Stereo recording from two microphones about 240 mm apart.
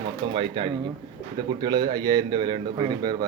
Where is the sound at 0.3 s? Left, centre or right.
Right.